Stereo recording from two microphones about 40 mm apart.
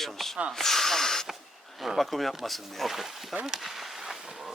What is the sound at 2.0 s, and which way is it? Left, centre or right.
Speech, centre.